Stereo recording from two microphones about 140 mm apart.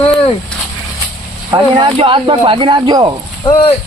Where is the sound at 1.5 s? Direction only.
35° right (ahead or behind).